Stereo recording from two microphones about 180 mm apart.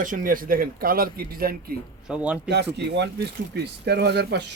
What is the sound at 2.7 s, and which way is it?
Speech, 70° right (ahead or behind).